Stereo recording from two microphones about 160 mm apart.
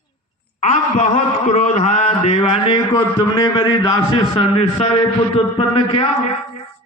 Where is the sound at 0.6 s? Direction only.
45° left (ahead or behind).